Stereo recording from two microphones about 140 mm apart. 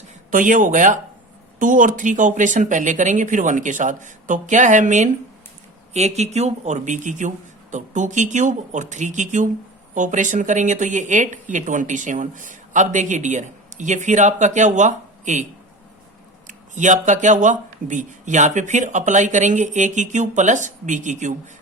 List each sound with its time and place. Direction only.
0.3 s speech: 70° right (ahead or behind)
16.5 s speech: 60° right (ahead or behind)